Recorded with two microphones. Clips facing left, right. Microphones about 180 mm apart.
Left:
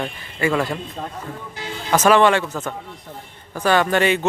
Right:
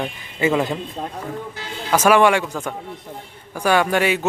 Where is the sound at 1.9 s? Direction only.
10° right (ahead or behind).